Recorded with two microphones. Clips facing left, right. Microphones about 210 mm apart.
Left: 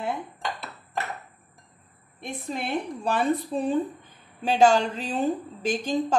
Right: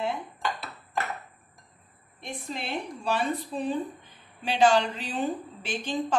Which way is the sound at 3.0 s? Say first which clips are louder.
Left 3 dB; 50° left (ahead or behind).